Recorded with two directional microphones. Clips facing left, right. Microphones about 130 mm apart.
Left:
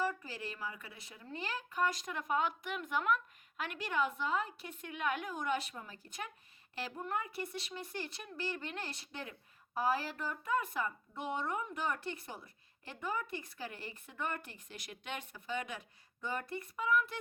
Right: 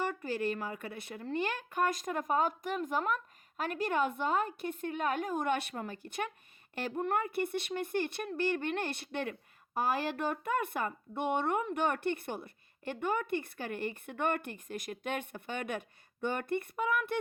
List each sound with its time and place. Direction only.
0.0 s a woman's voice: 65° right (ahead or behind)
6.7 s speech: 55° right (ahead or behind)